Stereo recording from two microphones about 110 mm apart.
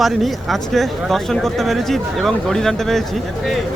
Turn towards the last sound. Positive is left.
turn(degrees=5)  # may be behind; listen again after turning